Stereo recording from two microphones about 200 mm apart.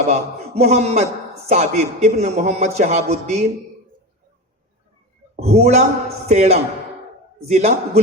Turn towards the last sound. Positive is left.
turn(degrees=-35)  # may be behind; listen again after turning